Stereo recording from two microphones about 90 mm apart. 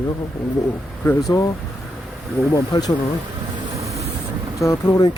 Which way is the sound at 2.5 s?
45° left (ahead or behind).